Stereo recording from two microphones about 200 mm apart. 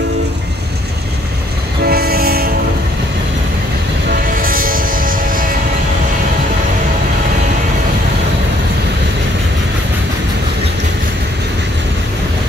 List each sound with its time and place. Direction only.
1.9 s train: 50° right (ahead or behind)
4.1 s music: 45° right (ahead or behind)